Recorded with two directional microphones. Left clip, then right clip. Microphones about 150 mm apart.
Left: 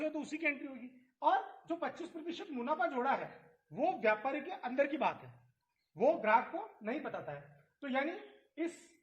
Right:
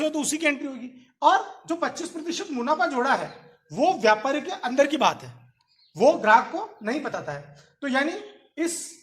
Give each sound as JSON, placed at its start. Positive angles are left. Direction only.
{"t": 0.0, "sound": "a woman's voice", "side_deg": -20}
{"t": 3.7, "sound": "speech", "side_deg": -25}
{"t": 6.0, "sound": "a woman's voice", "side_deg": -15}